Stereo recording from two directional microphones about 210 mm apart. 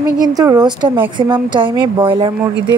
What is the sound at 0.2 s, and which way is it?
A woman's voice, 20° right (ahead or behind).